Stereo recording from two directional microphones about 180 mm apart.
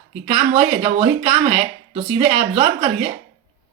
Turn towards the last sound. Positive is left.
turn(degrees=-30)  # may be behind; listen again after turning